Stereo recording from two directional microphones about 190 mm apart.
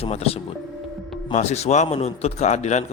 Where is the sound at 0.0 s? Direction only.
30° left (ahead or behind).